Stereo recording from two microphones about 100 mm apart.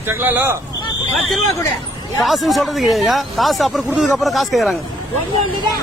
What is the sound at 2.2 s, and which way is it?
Speech, centre (ahead or behind).